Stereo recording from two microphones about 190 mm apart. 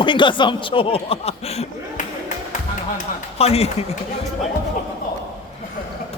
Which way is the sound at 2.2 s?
40° left (ahead or behind).